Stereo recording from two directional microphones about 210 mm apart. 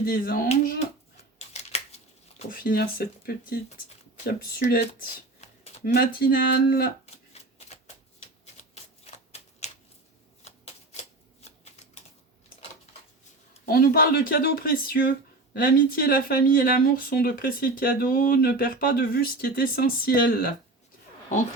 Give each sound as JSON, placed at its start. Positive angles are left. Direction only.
{"t": 0.0, "sound": "speech", "side_deg": 45}
{"t": 1.1, "sound": "scissors", "side_deg": 30}
{"t": 2.5, "sound": "speech", "side_deg": 45}
{"t": 4.6, "sound": "speech", "side_deg": 40}
{"t": 7.0, "sound": "typewriter", "side_deg": 30}
{"t": 10.4, "sound": "shuffling cards", "side_deg": 30}
{"t": 13.7, "sound": "speech", "side_deg": 45}